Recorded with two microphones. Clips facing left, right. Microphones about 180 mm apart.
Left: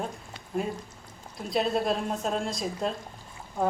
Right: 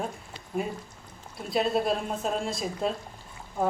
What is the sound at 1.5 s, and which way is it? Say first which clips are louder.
A woman's voice: right 1 dB; centre (ahead or behind).